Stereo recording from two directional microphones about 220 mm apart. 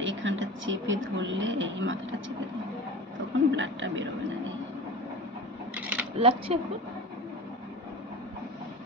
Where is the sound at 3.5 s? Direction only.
55° right (ahead or behind).